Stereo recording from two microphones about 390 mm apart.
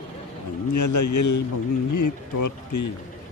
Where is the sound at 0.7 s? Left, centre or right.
Left.